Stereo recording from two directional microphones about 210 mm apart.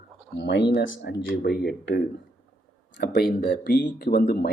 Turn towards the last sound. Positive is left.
turn(degrees=50)  # may be behind; listen again after turning